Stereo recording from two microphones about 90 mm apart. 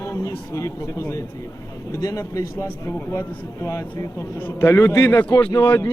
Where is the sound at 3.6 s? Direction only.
35° left (ahead or behind).